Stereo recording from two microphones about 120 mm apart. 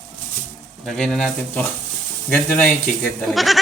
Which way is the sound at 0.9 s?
5° left (ahead or behind).